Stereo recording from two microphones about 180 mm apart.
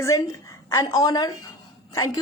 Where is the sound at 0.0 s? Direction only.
15° left (ahead or behind).